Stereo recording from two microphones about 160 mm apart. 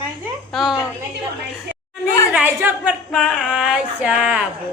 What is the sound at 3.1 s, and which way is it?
A woman's voice, centre (ahead or behind).